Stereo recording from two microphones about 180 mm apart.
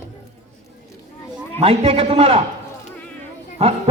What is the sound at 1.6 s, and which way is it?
Speech, 30° right (ahead or behind).